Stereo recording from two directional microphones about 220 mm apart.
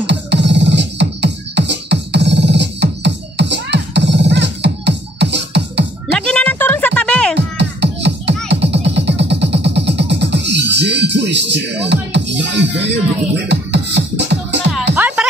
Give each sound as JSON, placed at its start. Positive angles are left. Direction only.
{"t": 0.0, "sound": "music", "side_deg": -50}
{"t": 6.1, "sound": "music", "side_deg": 5}
{"t": 7.3, "sound": "beatboxing", "side_deg": -50}
{"t": 8.5, "sound": "music", "side_deg": -50}
{"t": 15.0, "sound": "music", "side_deg": -5}